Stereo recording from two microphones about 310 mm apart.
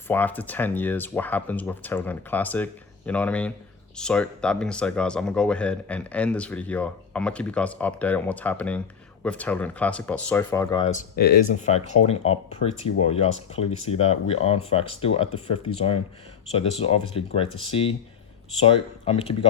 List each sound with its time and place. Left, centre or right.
0.1 s speech: centre